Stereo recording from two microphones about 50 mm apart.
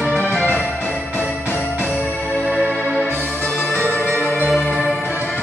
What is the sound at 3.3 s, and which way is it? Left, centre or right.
Music, left.